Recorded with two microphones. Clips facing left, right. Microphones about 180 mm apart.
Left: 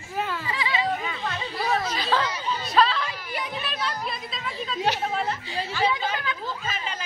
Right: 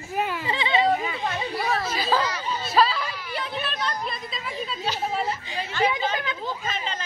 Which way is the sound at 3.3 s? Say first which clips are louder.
Right 1 dB; 15° left (ahead or behind).